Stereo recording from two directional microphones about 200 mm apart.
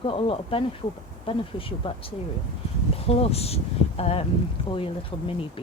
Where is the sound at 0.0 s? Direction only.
25° left (ahead or behind).